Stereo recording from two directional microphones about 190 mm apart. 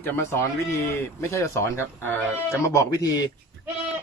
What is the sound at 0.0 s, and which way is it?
Speech, 10° left (ahead or behind).